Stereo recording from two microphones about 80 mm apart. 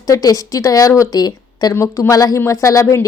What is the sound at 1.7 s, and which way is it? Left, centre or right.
A woman's voice, left.